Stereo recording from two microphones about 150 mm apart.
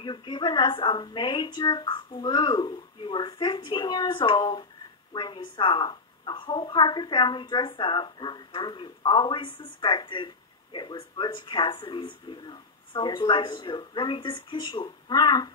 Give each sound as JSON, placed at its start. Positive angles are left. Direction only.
{"t": 0.0, "sound": "a woman's voice", "side_deg": 30}